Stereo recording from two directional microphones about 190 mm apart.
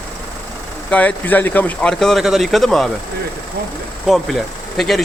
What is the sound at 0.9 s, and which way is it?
A man's voice, 10° left (ahead or behind).